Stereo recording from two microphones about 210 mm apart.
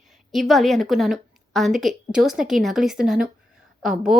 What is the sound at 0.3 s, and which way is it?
A woman's voice, centre (ahead or behind).